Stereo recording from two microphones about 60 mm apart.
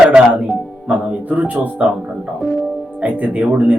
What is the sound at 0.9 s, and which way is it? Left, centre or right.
A man's voice, right.